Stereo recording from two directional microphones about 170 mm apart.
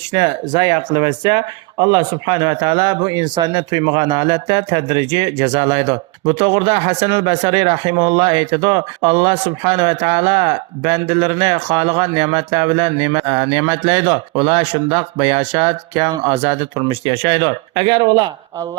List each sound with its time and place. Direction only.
0.1 s speech: 25° right (ahead or behind)